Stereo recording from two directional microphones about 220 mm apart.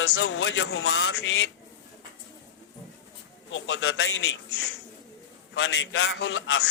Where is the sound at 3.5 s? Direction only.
60° left (ahead or behind).